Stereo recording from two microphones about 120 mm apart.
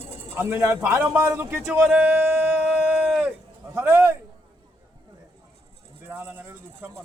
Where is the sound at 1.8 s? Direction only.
10° right (ahead or behind).